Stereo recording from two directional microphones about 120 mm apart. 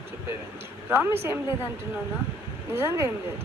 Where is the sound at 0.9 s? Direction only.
20° right (ahead or behind).